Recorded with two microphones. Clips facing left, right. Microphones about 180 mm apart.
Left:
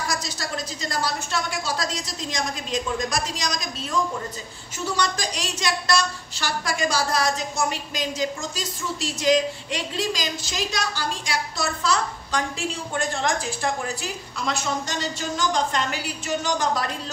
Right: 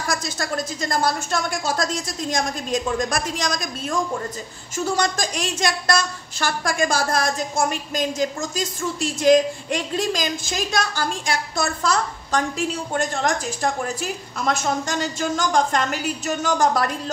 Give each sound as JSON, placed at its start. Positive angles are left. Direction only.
{"t": 0.1, "sound": "a woman's voice", "side_deg": -50}
{"t": 4.8, "sound": "a woman's voice", "side_deg": -50}